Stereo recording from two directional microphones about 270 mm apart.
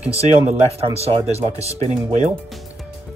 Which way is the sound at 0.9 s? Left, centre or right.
Right.